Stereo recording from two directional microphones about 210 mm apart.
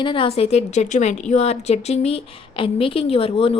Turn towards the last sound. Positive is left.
turn(degrees=25)  # may be behind; listen again after turning